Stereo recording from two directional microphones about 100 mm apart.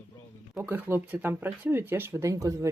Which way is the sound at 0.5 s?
20° right (ahead or behind).